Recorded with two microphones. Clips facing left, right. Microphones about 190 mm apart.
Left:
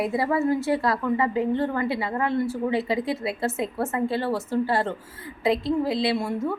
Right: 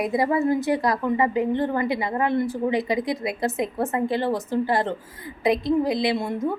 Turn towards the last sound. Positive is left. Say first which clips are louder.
# right 1 dB
turn(degrees=-20)  # may be behind; listen again after turning